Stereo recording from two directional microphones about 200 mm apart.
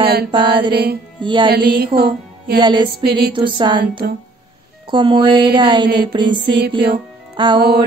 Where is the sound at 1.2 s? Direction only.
25° right (ahead or behind).